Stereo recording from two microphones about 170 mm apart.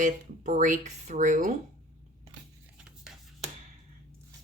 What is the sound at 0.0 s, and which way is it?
Speech, 50° right (ahead or behind).